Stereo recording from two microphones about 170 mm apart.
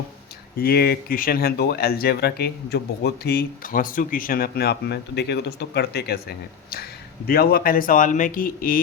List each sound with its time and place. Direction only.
0.5 s speech: 65° left (ahead or behind)